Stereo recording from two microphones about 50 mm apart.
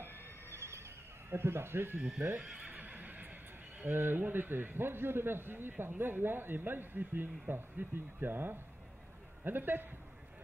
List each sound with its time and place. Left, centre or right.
0.5 s neigh: right
2.2 s a man's voice: right
2.6 s neigh: right
3.8 s a man's voice: right